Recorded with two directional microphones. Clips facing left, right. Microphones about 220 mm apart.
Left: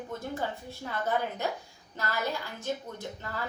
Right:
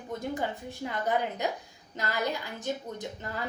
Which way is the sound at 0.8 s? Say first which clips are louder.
Right 1 dB; 15° right (ahead or behind).